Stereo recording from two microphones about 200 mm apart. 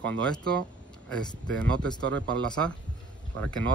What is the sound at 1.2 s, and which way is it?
Speech, 20° left (ahead or behind).